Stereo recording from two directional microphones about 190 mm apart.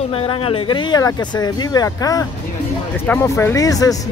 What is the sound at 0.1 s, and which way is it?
Speech, 30° left (ahead or behind).